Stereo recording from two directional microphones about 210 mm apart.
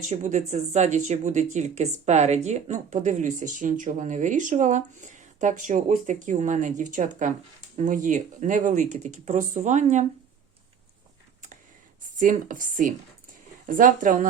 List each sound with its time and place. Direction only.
0.0 s speech: 35° right (ahead or behind)
12.2 s speech: 40° right (ahead or behind)